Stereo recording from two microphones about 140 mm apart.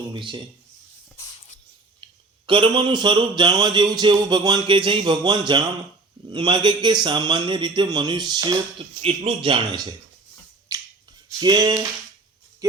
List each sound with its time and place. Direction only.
0.1 s a man's voice: 35° right (ahead or behind)
2.5 s a man's voice: 35° right (ahead or behind)
9.0 s a man's voice: 40° right (ahead or behind)
10.7 s finger snapping: 25° right (ahead or behind)
11.3 s a sound: 30° right (ahead or behind)